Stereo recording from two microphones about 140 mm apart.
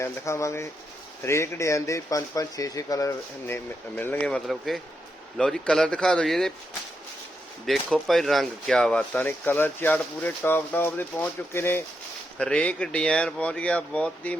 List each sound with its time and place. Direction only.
0.0 s speech: 20° left (ahead or behind); by 6.5 s 5° left (ahead or behind)
7.7 s speech: centre (ahead or behind)